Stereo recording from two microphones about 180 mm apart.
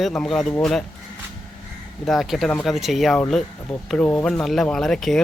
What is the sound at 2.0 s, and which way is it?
Speech, centre (ahead or behind).